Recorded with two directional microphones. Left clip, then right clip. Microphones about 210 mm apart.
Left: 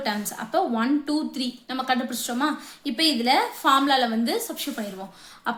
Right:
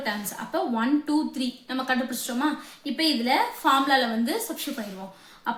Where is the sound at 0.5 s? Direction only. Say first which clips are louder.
Left 2 dB; 30° left (ahead or behind).